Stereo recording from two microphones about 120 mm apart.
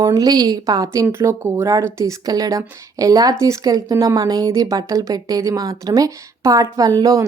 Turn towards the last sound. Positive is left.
turn(degrees=-30)  # may be behind; listen again after turning